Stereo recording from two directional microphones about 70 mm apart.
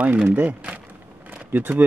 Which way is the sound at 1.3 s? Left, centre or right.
Right.